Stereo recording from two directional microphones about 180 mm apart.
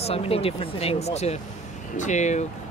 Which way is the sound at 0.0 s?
35° left (ahead or behind).